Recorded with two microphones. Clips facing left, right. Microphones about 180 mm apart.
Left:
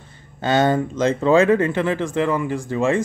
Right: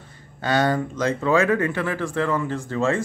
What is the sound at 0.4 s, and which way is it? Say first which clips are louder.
Speech: left 3 dB; 25° left (ahead or behind).